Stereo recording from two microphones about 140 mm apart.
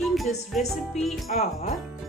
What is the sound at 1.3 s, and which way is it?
Speech, 60° left (ahead or behind).